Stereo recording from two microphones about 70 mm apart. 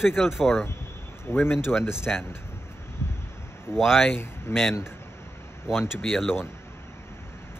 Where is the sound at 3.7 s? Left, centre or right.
Centre.